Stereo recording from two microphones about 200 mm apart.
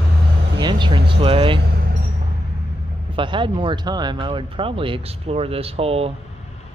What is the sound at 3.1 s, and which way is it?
Speech, 25° right (ahead or behind).